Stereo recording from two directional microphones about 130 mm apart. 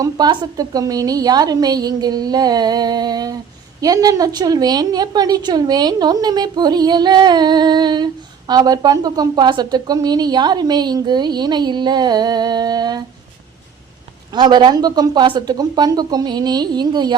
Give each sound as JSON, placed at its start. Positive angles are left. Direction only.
{"t": 0.0, "sound": "a woman's voice", "side_deg": -30}
{"t": 14.3, "sound": "a woman's voice", "side_deg": -35}